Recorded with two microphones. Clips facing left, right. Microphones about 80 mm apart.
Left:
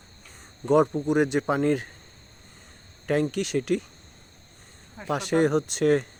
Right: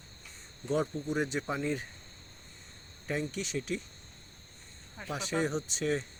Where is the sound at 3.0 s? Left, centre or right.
Left.